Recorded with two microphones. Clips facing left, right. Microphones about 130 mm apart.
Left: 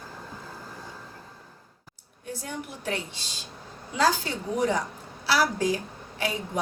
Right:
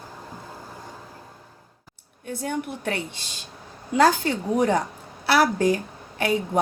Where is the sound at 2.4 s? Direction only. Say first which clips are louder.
Right 7 dB; 60° right (ahead or behind).